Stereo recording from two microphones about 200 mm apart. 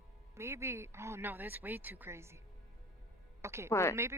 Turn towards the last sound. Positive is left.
turn(degrees=15)  # may be behind; listen again after turning